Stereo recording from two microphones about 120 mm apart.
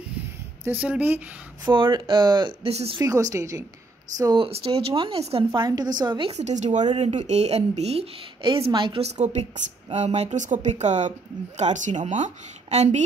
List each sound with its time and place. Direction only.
0.7 s speech: 10° right (ahead or behind)
1.7 s speech: 45° right (ahead or behind)
2.7 s speech: 60° right (ahead or behind)
3.0 s a woman's voice: 25° right (ahead or behind)
4.4 s a woman's voice: 50° right (ahead or behind)
5.5 s speech: 35° right (ahead or behind)
6.3 s speech: 75° right (ahead or behind)
7.0 s speech: 65° right (ahead or behind)
8.4 s a woman's voice: 45° right (ahead or behind); by 13.0 s 65° right (ahead or behind)